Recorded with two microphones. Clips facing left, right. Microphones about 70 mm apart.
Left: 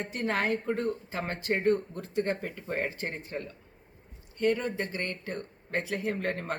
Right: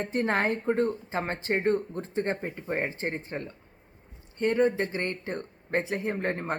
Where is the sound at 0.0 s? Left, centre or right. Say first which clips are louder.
Right 4 dB; right.